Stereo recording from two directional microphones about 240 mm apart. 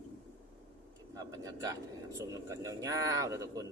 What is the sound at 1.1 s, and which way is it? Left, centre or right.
Bird, centre.